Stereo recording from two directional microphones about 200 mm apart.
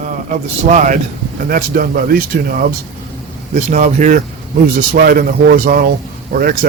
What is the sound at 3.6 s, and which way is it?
Speech, 35° right (ahead or behind).